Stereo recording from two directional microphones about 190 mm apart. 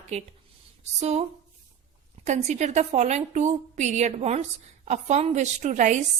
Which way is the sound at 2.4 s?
35° right (ahead or behind).